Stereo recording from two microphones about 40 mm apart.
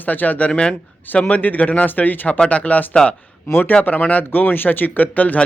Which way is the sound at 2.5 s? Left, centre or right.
Left.